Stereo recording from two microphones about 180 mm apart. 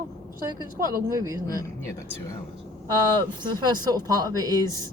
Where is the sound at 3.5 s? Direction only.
20° right (ahead or behind).